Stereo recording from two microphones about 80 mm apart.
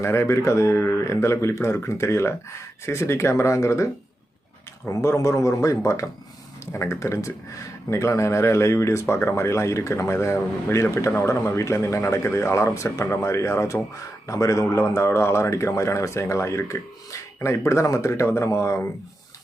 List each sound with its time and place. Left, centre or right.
0.0 s speech: left
4.9 s speech: left
11.4 s speech: left